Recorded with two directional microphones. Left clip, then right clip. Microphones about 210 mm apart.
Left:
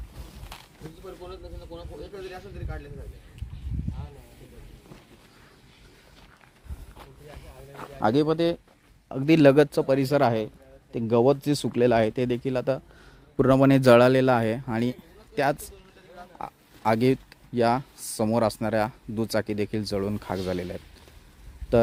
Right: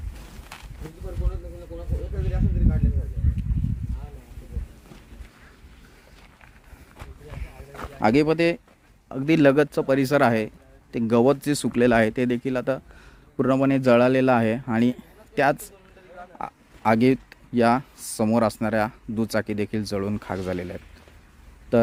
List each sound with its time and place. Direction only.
0.5 s a sound: 5° left (ahead or behind)
7.7 s speech: 10° right (ahead or behind)
9.0 s speech: 5° left (ahead or behind)
9.8 s speech: 5° right (ahead or behind)
13.3 s speech: 15° left (ahead or behind)
14.1 s speech: centre (ahead or behind)
21.7 s a sound: 5° left (ahead or behind)